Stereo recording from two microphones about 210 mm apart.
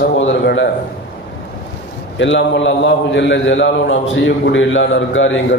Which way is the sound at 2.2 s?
60° left (ahead or behind).